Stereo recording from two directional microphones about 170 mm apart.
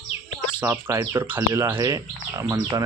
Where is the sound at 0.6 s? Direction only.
10° right (ahead or behind).